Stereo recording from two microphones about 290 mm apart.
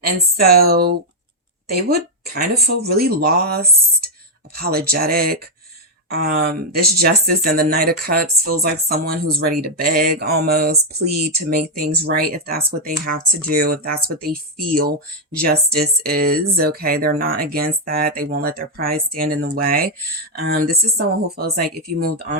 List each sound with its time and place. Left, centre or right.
0.3 s speech: right